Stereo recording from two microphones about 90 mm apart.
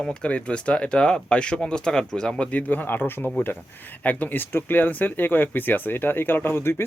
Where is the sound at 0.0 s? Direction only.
10° left (ahead or behind).